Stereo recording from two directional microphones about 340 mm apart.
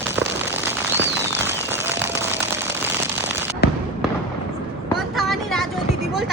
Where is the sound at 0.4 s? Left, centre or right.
Centre.